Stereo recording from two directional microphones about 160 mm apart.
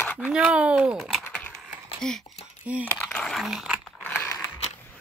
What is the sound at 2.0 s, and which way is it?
Speech, 5° left (ahead or behind).